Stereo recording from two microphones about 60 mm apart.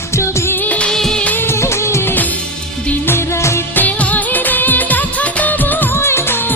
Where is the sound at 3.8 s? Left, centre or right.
Left.